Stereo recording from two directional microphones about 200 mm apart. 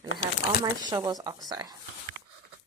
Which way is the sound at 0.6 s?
20° right (ahead or behind).